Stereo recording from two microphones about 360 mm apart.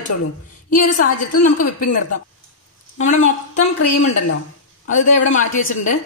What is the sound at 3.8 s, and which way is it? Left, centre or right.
Speech, left.